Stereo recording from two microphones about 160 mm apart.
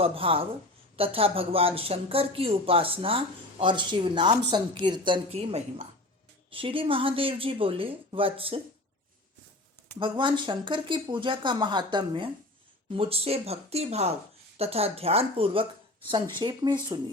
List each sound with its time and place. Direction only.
0.0 s speech: 35° right (ahead or behind)
10.0 s speech: 30° right (ahead or behind)